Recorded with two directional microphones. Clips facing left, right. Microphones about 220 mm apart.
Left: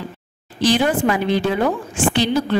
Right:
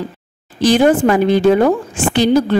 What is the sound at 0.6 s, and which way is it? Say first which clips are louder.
A woman's voice: right 6 dB; 45° right (ahead or behind).